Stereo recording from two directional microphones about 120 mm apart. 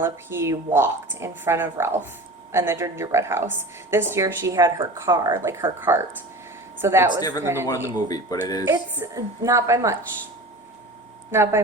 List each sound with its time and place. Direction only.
0.0 s a woman's voice: 20° right (ahead or behind)
7.2 s speech: 30° left (ahead or behind)
7.4 s a woman's voice: 20° right (ahead or behind)
8.0 s speech: 30° left (ahead or behind)
8.6 s a woman's voice: 20° right (ahead or behind)
11.3 s a woman's voice: 20° right (ahead or behind)